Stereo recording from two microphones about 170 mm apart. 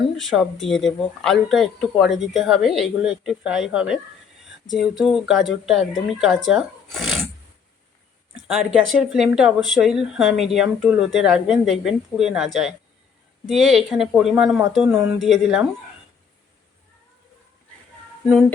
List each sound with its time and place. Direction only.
0.2 s speech: centre (ahead or behind)
8.4 s speech: centre (ahead or behind)
13.5 s speech: centre (ahead or behind)